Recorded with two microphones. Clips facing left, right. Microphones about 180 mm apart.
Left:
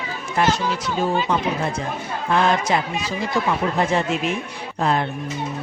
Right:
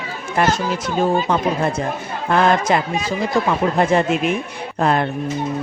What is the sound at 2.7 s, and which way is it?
Speech, 50° right (ahead or behind).